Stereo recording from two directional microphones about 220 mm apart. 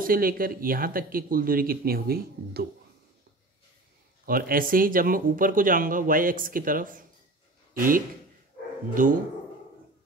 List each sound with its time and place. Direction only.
0.0 s speech: 40° right (ahead or behind)
4.3 s speech: 40° right (ahead or behind)
9.0 s speech: 40° right (ahead or behind)